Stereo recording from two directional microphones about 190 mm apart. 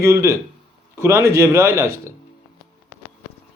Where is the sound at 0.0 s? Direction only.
15° right (ahead or behind).